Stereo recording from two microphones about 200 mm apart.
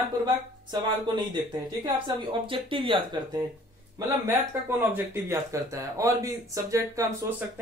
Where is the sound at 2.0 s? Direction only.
25° right (ahead or behind).